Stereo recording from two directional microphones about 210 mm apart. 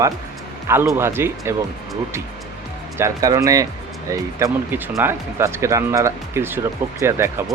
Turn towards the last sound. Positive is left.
turn(degrees=-10)  # may be behind; listen again after turning